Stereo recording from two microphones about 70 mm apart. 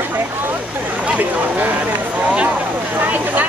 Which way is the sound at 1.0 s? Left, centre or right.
Right.